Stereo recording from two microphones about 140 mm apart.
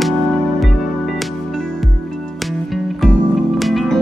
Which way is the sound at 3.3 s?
Centre (ahead or behind).